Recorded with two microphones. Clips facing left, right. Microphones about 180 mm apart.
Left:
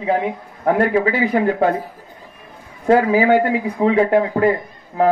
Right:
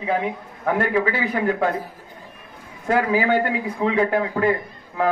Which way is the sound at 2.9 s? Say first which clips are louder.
Left 6 dB; 30° left (ahead or behind).